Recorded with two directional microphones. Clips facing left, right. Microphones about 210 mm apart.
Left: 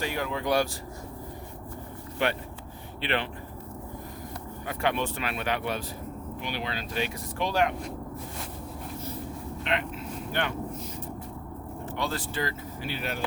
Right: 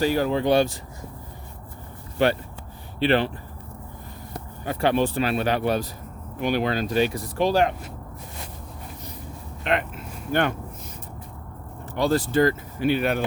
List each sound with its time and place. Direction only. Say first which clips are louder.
0.0 s speech: right 9 dB; 35° right (ahead or behind)
2.2 s speech: right 7 dB; 35° right (ahead or behind)
4.6 s speech: right 7 dB; 30° right (ahead or behind)
9.6 s vehicle: right 6 dB; 50° right (ahead or behind)
11.9 s speech: right 12 dB; 40° right (ahead or behind); by 13.2 s 60° right (ahead or behind)